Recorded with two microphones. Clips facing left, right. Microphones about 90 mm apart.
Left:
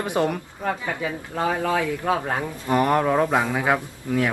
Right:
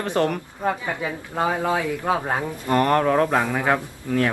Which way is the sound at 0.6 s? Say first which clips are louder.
Right 2 dB; 25° right (ahead or behind).